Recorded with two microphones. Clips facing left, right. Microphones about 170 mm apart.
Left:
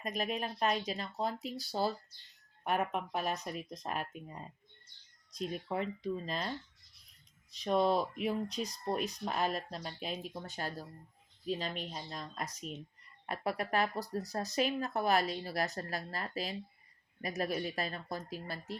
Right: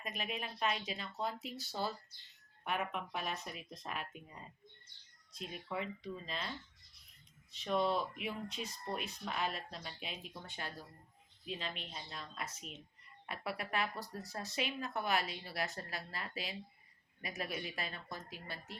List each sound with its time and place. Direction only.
0.0 s speech: 40° left (ahead or behind)
7.5 s speech: 40° left (ahead or behind)